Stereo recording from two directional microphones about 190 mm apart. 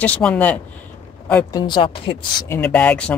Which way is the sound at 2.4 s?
10° left (ahead or behind).